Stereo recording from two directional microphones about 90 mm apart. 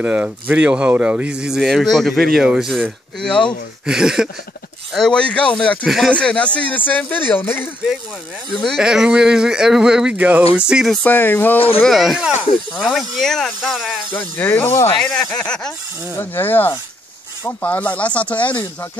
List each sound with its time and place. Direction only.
0.0 s speech: 20° right (ahead or behind)
3.2 s speech: 10° left (ahead or behind)
3.8 s speech: 5° right (ahead or behind)
4.9 s speech: 10° left (ahead or behind); by 7.7 s 25° left (ahead or behind)
8.7 s speech: 5° right (ahead or behind)
11.1 s speech: 20° left (ahead or behind)
11.8 s speech: centre (ahead or behind)
14.1 s speech: 20° left (ahead or behind)
15.0 s speech: 10° left (ahead or behind)
16.2 s speech: 20° left (ahead or behind)